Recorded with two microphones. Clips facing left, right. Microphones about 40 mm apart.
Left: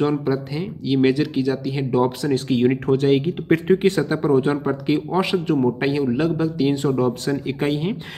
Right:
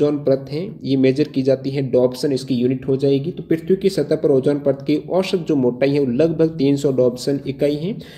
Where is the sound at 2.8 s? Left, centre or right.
Left.